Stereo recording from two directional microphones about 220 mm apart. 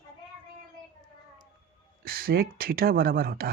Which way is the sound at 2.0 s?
45° right (ahead or behind).